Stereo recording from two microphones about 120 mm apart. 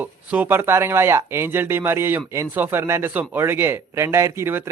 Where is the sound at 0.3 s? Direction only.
15° right (ahead or behind).